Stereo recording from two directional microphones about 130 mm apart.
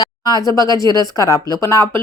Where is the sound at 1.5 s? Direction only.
25° left (ahead or behind).